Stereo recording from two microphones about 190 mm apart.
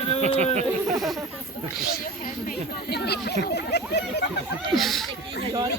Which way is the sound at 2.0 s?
45° left (ahead or behind).